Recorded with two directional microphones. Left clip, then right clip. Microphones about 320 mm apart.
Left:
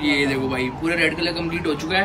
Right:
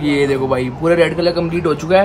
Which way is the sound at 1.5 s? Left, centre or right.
Right.